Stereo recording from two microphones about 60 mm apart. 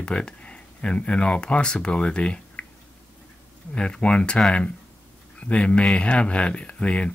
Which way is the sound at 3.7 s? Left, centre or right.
Centre.